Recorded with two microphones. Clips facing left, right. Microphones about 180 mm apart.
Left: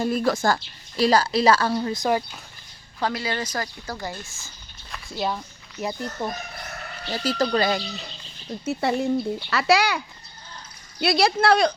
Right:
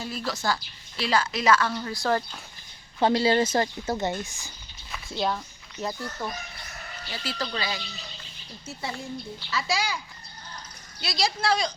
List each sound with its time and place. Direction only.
0.3 s a woman's voice: 50° left (ahead or behind); by 1.9 s 35° left (ahead or behind)
1.9 s speech: 15° left (ahead or behind)
3.0 s speech: 30° right (ahead or behind)
4.9 s a sound: centre (ahead or behind)
5.8 s speech: 20° left (ahead or behind)
7.1 s speech: 40° left (ahead or behind)
8.6 s speech: 65° left (ahead or behind)
11.0 s speech: 60° left (ahead or behind)